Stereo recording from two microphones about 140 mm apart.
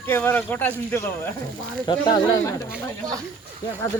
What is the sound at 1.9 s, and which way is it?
Speech, 35° left (ahead or behind).